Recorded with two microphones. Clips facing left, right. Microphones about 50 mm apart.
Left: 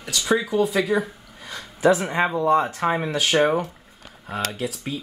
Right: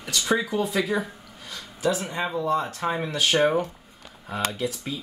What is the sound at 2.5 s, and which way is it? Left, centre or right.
Speech, centre.